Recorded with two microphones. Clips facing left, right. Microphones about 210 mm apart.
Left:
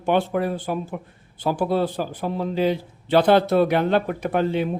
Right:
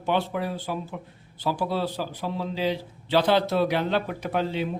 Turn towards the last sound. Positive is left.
turn(degrees=55)  # may be behind; listen again after turning